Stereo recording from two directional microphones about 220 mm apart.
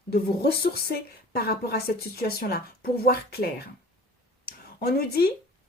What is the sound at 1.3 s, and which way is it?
A woman's voice, 45° left (ahead or behind).